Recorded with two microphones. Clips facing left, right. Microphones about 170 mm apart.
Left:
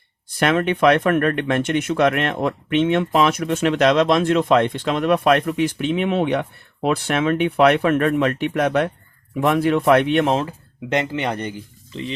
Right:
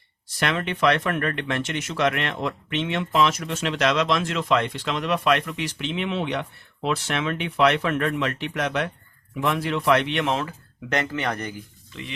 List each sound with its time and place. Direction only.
0.3 s speech: 50° left (ahead or behind)
10.3 s speech: 25° left (ahead or behind)